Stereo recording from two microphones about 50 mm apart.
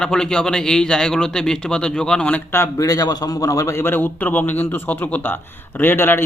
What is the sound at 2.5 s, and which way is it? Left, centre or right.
Speech, left.